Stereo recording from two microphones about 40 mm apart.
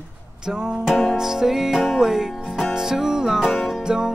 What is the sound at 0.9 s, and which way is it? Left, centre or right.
Music, centre.